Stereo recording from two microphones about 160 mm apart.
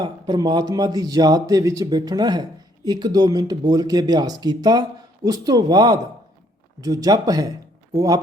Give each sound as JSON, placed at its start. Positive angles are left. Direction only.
{"t": 0.0, "sound": "speech", "side_deg": -25}